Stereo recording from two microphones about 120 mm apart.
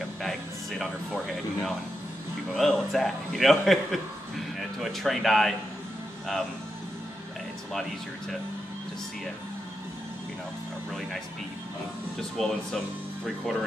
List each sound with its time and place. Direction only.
0.2 s a man's voice: centre (ahead or behind)
12.4 s a man's voice: centre (ahead or behind)